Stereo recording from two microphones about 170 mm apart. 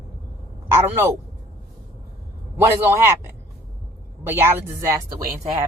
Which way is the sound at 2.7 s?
10° right (ahead or behind).